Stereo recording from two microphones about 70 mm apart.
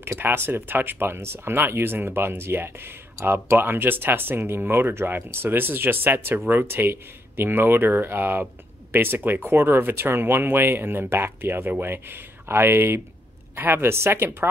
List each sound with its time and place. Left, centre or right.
0.2 s speech: right